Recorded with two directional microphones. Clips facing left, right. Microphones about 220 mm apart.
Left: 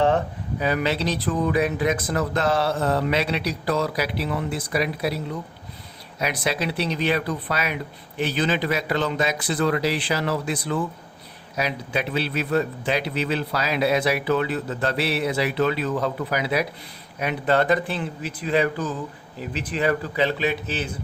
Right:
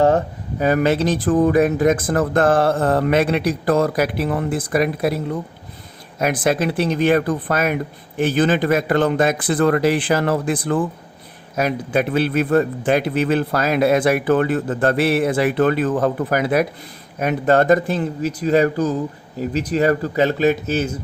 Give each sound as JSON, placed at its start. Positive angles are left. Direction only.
{"t": 0.6, "sound": "a man's voice", "side_deg": -45}